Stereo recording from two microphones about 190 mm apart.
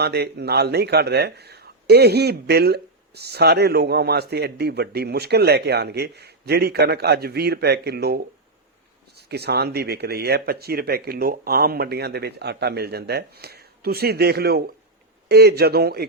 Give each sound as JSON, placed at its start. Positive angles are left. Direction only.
{"t": 0.0, "sound": "speech", "side_deg": -60}